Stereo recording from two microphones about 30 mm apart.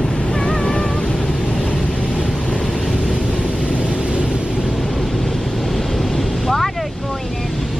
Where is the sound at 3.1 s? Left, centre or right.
Right.